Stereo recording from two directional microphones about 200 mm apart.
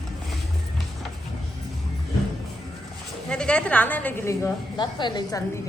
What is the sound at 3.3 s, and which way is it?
A woman's voice, 5° left (ahead or behind).